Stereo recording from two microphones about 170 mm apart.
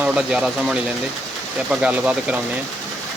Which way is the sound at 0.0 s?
5° right (ahead or behind).